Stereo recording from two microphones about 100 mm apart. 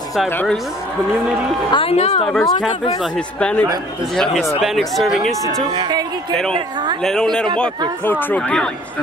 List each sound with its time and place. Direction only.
1.7 s a woman's voice: 70° left (ahead or behind)
2.2 s a man's voice: 5° left (ahead or behind)
5.8 s speech: 45° right (ahead or behind)
7.0 s speech: 5° left (ahead or behind)
8.0 s speech: 20° left (ahead or behind)
8.4 s a man's voice: 10° left (ahead or behind)